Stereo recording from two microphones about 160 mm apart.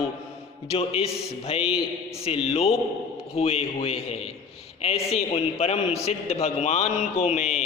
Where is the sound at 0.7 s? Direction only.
40° left (ahead or behind).